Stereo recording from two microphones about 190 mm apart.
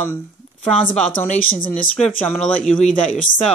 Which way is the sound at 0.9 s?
5° left (ahead or behind).